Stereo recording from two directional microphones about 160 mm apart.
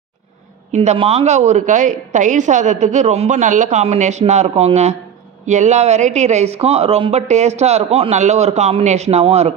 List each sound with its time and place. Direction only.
0.7 s a woman's voice: 40° right (ahead or behind)